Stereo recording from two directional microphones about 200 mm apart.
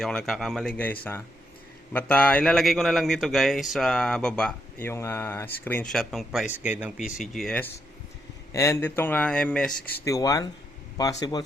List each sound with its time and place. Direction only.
0.0 s a man's voice: centre (ahead or behind)
8.5 s a man's voice: 15° left (ahead or behind)
10.0 s a man's voice: 15° left (ahead or behind)